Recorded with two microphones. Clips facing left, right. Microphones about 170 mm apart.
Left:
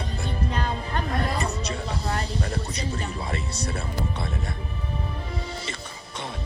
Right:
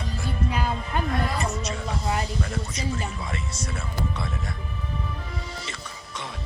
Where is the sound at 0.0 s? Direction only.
35° left (ahead or behind).